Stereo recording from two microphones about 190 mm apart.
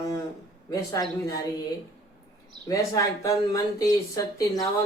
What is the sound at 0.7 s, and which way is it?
Speech, 15° left (ahead or behind).